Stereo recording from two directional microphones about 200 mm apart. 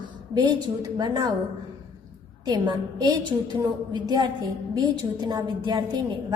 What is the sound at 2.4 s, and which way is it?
A woman's voice, 20° right (ahead or behind).